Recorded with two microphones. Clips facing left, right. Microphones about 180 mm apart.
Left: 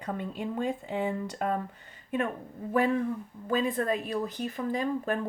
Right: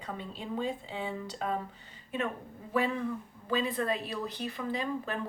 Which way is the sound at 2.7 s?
50° left (ahead or behind).